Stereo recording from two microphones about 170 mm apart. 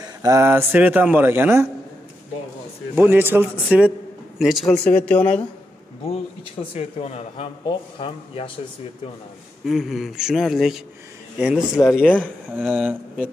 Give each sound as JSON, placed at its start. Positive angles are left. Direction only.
{"t": 0.0, "sound": "speech", "side_deg": -20}
{"t": 3.0, "sound": "speech", "side_deg": -10}
{"t": 6.6, "sound": "speech", "side_deg": 35}
{"t": 9.7, "sound": "speech", "side_deg": 0}
{"t": 12.0, "sound": "speech", "side_deg": 10}
{"t": 12.5, "sound": "speech", "side_deg": -10}